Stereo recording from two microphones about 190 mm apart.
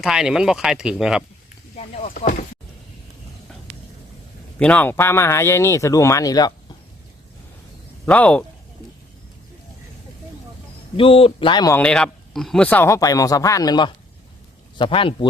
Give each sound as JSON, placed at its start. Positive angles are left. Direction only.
{"t": 0.0, "sound": "speech", "side_deg": -5}
{"t": 1.7, "sound": "speech", "side_deg": 35}
{"t": 4.5, "sound": "speech", "side_deg": 5}
{"t": 8.0, "sound": "speech", "side_deg": 5}
{"t": 10.9, "sound": "speech", "side_deg": 30}
{"t": 11.8, "sound": "speech", "side_deg": 5}